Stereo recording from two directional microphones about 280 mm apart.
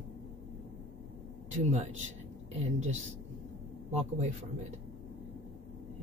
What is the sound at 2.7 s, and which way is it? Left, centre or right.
Speech, right.